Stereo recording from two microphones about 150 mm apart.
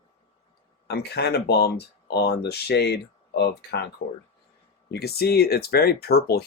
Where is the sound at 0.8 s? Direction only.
90° left.